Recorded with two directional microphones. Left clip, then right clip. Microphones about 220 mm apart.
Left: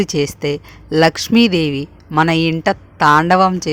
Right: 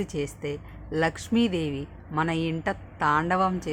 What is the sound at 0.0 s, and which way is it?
Speech, 45° left (ahead or behind).